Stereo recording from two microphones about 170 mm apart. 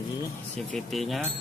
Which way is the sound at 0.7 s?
Centre (ahead or behind).